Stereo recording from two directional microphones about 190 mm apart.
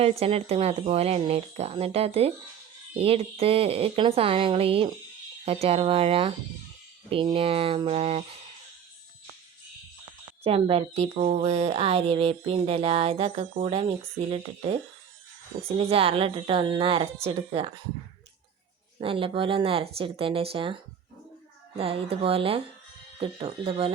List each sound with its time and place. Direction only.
0.0 s speech: 30° right (ahead or behind)
10.4 s speech: 30° right (ahead or behind)
15.8 s speech: 30° right (ahead or behind)
18.9 s speech: 30° right (ahead or behind)
21.8 s speech: 30° right (ahead or behind)